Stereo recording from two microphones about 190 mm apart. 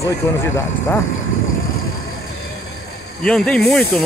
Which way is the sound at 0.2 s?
15° left (ahead or behind).